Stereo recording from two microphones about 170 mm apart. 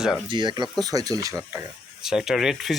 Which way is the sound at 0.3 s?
25° right (ahead or behind).